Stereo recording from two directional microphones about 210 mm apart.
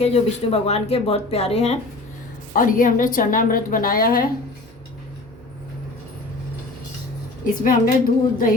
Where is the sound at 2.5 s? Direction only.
40° left (ahead or behind).